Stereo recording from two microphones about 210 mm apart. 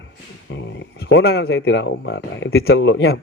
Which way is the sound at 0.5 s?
60° left (ahead or behind).